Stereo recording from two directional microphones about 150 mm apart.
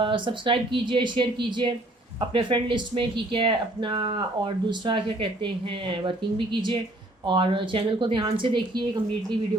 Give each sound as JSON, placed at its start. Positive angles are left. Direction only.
{"t": 0.0, "sound": "speech", "side_deg": -35}